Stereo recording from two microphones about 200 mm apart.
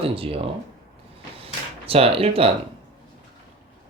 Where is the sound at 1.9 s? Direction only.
30° right (ahead or behind).